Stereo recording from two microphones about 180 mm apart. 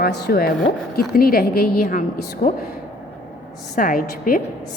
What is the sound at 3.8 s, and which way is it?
Speech, 50° left (ahead or behind).